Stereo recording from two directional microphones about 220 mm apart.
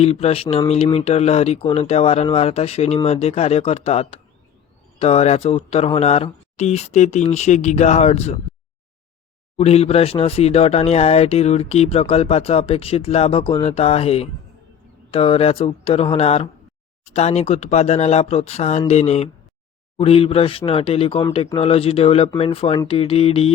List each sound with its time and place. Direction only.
0.0 s speech: 25° left (ahead or behind)
9.6 s speech: 30° left (ahead or behind)